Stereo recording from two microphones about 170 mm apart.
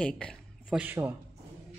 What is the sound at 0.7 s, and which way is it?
Speech, 10° right (ahead or behind).